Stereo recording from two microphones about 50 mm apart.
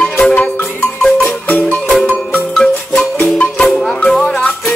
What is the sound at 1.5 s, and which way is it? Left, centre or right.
Marimba, left.